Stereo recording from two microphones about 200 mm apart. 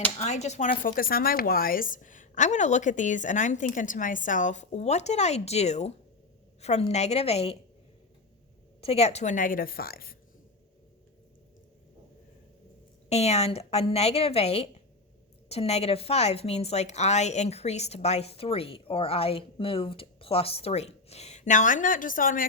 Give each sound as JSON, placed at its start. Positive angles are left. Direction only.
{"t": 0.2, "sound": "a woman's voice", "side_deg": 35}
{"t": 8.8, "sound": "a woman's voice", "side_deg": 30}
{"t": 13.1, "sound": "a woman's voice", "side_deg": 30}